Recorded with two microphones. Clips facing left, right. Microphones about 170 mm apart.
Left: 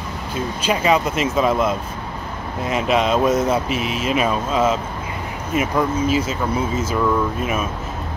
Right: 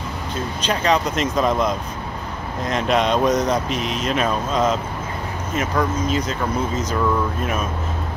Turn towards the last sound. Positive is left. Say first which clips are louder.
# left 1 dB
turn(degrees=5)  # may be behind; listen again after turning